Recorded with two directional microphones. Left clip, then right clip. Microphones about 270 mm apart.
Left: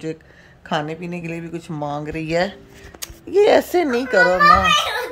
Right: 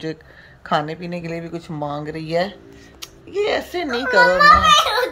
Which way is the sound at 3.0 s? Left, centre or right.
Left.